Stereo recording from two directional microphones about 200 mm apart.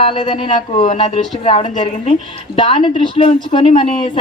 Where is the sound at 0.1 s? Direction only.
25° left (ahead or behind).